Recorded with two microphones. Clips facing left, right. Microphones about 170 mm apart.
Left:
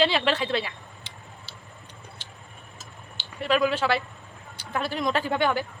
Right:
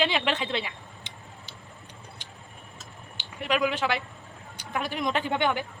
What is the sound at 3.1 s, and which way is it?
Speech, 15° right (ahead or behind).